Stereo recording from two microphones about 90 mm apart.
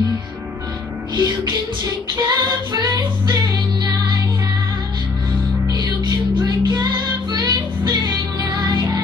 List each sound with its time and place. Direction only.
1.1 s music: 50° right (ahead or behind)
5.7 s music: 50° right (ahead or behind)